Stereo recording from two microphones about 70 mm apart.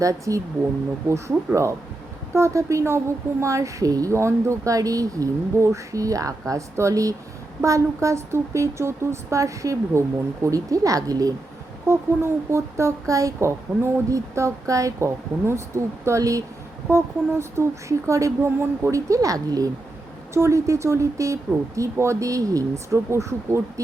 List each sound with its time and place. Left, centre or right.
0.0 s speech: right
4.1 s speech: right
11.9 s speech: right
16.9 s speech: right
20.3 s speech: right